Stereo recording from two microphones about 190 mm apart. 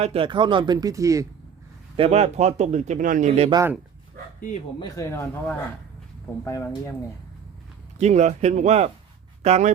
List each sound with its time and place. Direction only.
0.0 s speech: 30° right (ahead or behind)
2.0 s speech: 35° right (ahead or behind)
3.5 s speech: 15° right (ahead or behind)
4.8 s speech: 15° left (ahead or behind)
7.9 s speech: 35° right (ahead or behind)